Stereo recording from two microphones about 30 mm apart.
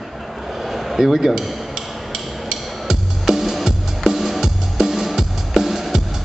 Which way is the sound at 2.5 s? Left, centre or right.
Centre.